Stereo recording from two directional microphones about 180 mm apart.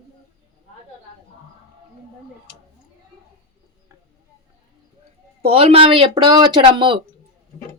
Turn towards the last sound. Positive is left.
turn(degrees=-30)  # may be behind; listen again after turning